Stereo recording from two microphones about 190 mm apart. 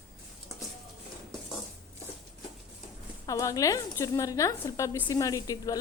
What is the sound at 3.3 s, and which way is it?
Speech, 15° left (ahead or behind).